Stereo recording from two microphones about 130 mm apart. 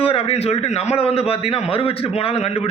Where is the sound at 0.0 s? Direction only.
50° left (ahead or behind).